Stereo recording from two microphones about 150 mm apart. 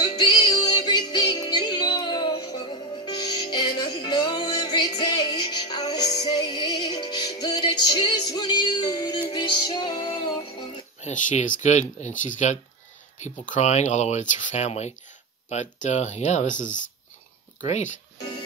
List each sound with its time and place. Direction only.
0.0 s music: 25° left (ahead or behind)
11.0 s speech: 50° left (ahead or behind)
17.6 s speech: 50° left (ahead or behind)